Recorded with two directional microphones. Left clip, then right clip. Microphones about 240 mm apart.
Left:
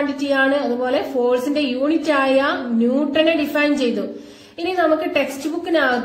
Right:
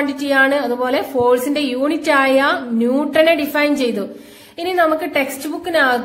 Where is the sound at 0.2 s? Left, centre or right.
Right.